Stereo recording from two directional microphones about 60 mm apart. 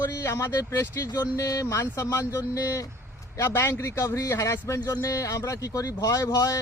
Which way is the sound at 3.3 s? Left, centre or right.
Left.